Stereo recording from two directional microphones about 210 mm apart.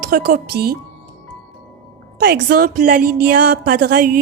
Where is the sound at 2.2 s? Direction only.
50° right (ahead or behind).